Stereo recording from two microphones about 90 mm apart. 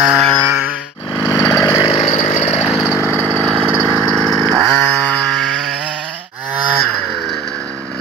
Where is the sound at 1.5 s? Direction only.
30° left (ahead or behind).